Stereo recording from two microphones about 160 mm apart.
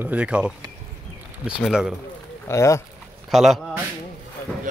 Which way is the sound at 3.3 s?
Centre (ahead or behind).